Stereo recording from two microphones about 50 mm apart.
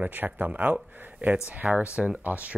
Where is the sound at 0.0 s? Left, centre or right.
Right.